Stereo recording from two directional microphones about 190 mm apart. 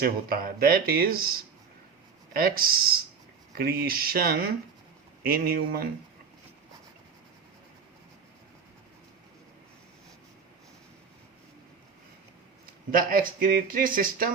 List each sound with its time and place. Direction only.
0.0 s speech: 50° right (ahead or behind)
2.3 s speech: 50° right (ahead or behind)
13.0 s speech: 50° right (ahead or behind)